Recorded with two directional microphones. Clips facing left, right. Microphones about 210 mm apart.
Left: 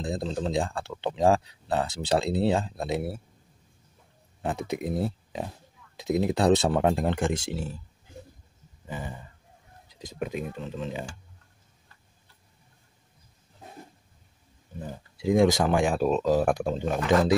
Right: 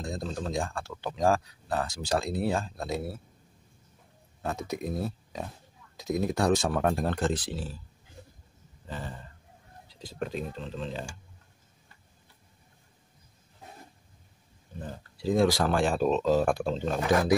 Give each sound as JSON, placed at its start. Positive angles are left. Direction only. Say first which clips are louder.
{"t": 0.0, "sound": "speech", "louder": "left 4 dB", "side_deg": 20}
{"t": 4.6, "sound": "speech", "louder": "left 4 dB", "side_deg": 20}
{"t": 8.8, "sound": "speech", "louder": "left 2 dB", "side_deg": 10}
{"t": 14.8, "sound": "speech", "louder": "left 2 dB", "side_deg": 15}